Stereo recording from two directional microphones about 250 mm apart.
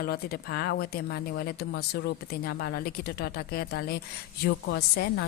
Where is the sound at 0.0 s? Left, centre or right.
Left.